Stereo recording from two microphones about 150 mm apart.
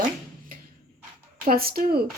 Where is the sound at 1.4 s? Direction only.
80° right.